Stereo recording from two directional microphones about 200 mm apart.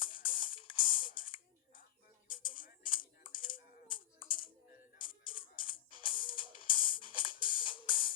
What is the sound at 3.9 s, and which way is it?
Typing, 25° left (ahead or behind).